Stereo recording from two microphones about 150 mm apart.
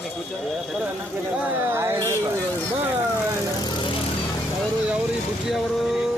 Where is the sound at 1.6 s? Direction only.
15° right (ahead or behind).